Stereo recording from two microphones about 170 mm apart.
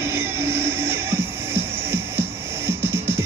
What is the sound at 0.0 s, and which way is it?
Music, 15° right (ahead or behind).